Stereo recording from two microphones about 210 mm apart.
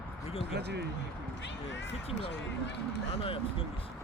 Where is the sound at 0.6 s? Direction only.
50° right (ahead or behind).